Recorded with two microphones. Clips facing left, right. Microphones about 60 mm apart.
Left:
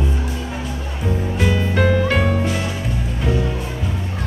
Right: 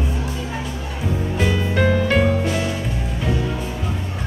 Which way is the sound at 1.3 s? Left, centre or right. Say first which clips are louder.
Left 1 dB; centre.